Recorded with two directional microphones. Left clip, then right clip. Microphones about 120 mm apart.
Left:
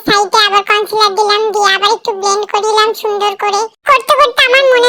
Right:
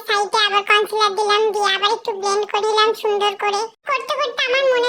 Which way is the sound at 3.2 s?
20° left (ahead or behind).